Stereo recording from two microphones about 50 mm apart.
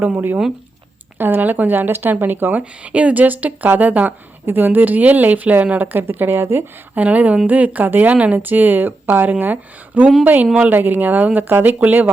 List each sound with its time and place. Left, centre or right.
0.0 s speech: right
5.8 s a woman's voice: right
6.9 s speech: right
8.4 s speech: right
10.4 s speech: right
10.7 s speech: right